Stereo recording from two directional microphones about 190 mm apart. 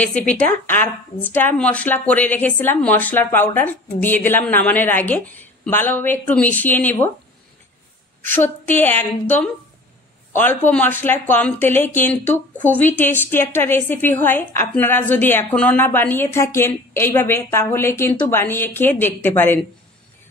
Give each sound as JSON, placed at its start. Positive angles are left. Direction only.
{"t": 0.0, "sound": "a woman's voice", "side_deg": 5}
{"t": 8.4, "sound": "a woman's voice", "side_deg": 10}